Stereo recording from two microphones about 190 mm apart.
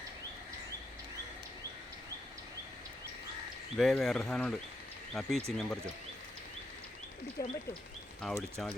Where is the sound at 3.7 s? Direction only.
Centre (ahead or behind).